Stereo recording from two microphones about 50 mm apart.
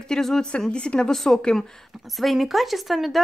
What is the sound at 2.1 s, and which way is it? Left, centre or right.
Speech, centre.